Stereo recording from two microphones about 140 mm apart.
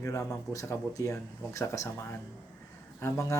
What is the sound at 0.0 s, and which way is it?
Speech, 20° left (ahead or behind).